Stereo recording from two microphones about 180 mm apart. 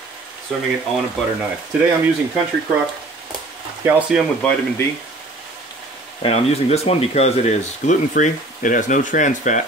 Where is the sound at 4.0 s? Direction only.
5° right (ahead or behind).